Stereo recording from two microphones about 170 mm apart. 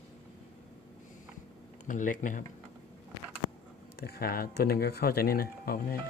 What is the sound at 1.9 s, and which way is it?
Speech, 50° left (ahead or behind).